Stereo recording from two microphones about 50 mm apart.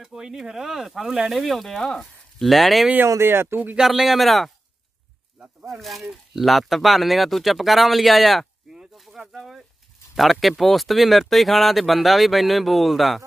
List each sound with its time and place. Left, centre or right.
0.0 s speech: centre
3.3 s speech: right
3.7 s speech: centre
5.7 s speech: centre
8.7 s bird: centre
10.3 s speech: centre